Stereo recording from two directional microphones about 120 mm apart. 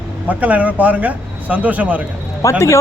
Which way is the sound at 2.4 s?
25° left (ahead or behind).